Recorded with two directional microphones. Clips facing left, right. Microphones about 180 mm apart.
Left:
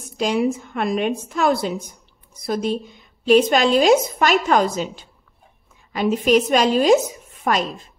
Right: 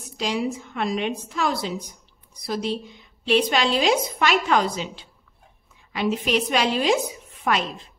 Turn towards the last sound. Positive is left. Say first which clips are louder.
# left 3 dB
turn(degrees=40)  # may be behind; listen again after turning